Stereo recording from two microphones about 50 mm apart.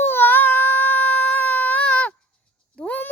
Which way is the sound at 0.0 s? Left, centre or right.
Left.